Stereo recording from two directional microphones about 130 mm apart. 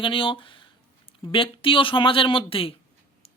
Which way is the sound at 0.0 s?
40° left (ahead or behind).